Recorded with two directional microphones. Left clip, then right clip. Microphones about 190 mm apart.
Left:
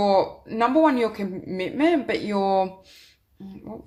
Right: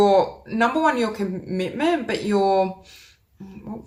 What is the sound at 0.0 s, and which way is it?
Speech, 35° left (ahead or behind).